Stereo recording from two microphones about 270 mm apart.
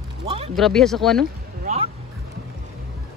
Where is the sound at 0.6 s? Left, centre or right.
Centre.